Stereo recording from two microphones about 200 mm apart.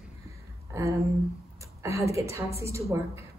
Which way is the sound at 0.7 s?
15° right (ahead or behind).